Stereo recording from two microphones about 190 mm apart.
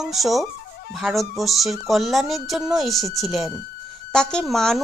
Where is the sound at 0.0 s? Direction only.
Centre (ahead or behind).